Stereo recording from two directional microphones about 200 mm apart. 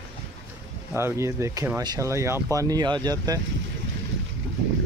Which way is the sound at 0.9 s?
15° right (ahead or behind).